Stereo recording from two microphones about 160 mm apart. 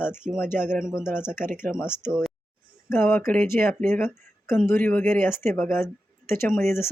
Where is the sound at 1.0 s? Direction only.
15° left (ahead or behind).